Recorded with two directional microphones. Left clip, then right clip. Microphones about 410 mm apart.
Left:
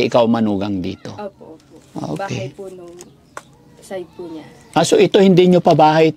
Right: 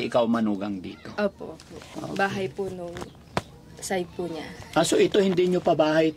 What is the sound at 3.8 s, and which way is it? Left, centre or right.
Speech, right.